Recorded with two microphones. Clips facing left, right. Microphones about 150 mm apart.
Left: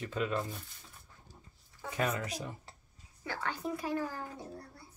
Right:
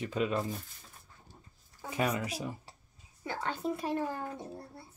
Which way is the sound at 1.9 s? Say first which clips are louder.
Right 2 dB; 15° right (ahead or behind).